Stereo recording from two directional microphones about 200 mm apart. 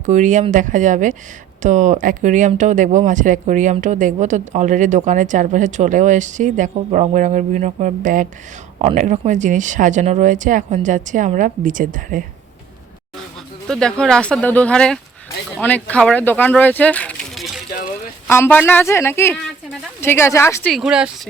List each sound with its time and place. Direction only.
0.0 s speech: 40° right (ahead or behind)
13.7 s speech: 5° left (ahead or behind)
17.7 s a sound: 45° left (ahead or behind)
18.3 s a woman's voice: 10° left (ahead or behind); by 21.1 s 5° right (ahead or behind)